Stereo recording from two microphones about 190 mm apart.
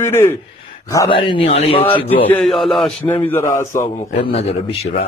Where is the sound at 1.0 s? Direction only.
25° left (ahead or behind).